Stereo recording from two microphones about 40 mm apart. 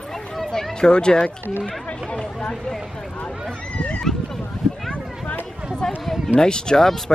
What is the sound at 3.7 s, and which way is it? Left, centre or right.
Cat, left.